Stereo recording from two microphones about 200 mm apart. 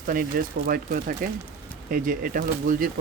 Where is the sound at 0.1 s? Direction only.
45° right (ahead or behind).